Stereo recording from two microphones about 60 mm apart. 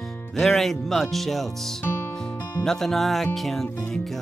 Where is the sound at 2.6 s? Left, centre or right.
Centre.